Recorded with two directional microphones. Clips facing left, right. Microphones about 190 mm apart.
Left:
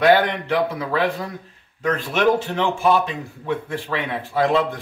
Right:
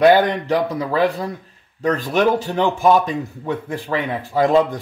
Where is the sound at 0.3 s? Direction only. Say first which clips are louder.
Right 2 dB; 40° right (ahead or behind).